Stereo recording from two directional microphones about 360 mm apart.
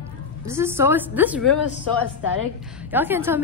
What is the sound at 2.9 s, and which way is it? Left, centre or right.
Speech, centre.